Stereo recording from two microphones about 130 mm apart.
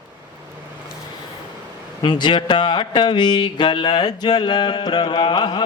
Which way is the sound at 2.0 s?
35° left (ahead or behind).